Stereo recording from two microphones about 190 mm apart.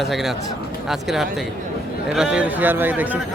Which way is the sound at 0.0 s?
Centre (ahead or behind).